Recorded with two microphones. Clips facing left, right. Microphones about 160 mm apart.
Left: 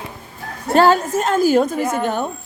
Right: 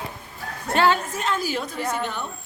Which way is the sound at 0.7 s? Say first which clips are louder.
Left 7 dB; 40° left (ahead or behind).